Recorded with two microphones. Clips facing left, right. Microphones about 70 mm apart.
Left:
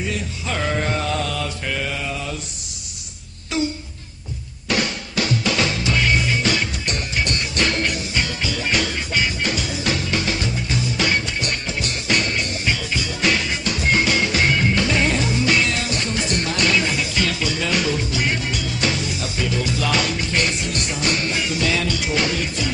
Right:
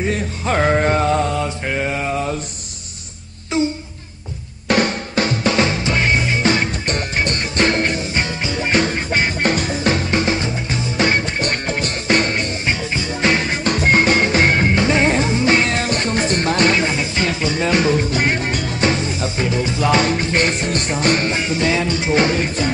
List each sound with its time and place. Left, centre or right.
0.0 s music: right
3.5 s a sound: right
4.6 s music: right